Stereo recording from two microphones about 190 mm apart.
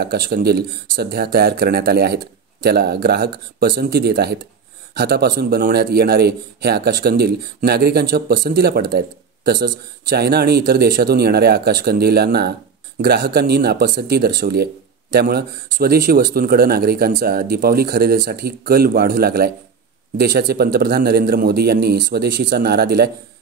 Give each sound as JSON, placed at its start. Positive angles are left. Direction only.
{"t": 0.0, "sound": "a man's voice", "side_deg": -55}